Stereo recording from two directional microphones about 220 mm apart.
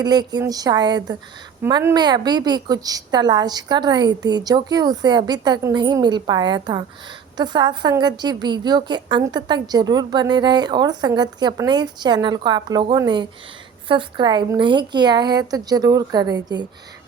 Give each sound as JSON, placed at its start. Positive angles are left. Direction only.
{"t": 0.0, "sound": "a woman's voice", "side_deg": -20}